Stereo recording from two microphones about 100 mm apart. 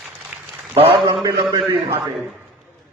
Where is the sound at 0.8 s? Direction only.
70° right (ahead or behind).